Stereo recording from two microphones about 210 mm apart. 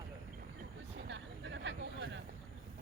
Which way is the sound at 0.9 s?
60° right (ahead or behind).